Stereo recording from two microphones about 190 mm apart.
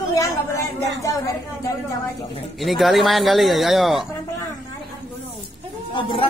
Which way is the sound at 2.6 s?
Centre (ahead or behind).